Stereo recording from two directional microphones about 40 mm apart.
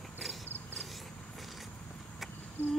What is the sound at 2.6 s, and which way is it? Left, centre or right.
Humming, left.